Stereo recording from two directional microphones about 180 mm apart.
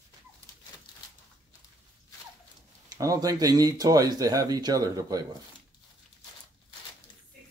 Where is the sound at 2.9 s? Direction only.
20° right (ahead or behind).